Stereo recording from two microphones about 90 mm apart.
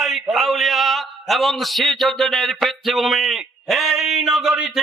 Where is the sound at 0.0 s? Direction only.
Centre (ahead or behind).